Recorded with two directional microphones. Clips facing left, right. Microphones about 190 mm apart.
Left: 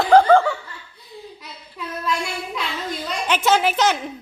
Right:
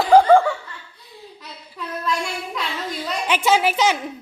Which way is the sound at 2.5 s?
Centre (ahead or behind).